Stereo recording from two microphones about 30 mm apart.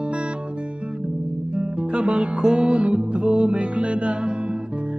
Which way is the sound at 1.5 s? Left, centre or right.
Right.